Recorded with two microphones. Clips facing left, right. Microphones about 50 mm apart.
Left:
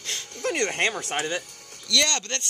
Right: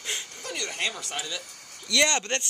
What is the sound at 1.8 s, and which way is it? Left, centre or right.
Speech, centre.